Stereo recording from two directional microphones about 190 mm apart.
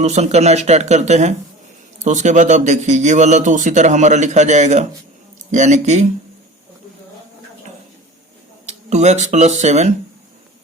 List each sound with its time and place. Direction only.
0.0 s a man's voice: 35° right (ahead or behind)
8.6 s speech: 35° right (ahead or behind)